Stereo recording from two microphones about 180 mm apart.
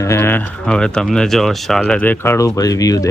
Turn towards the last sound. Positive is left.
turn(degrees=20)  # may be behind; listen again after turning